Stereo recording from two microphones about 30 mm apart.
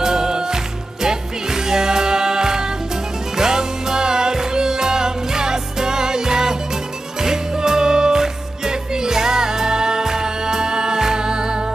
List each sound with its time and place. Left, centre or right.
0.0 s music: centre